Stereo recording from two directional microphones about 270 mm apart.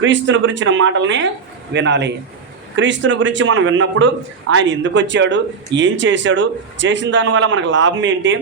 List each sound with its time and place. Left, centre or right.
0.0 s a man's voice: right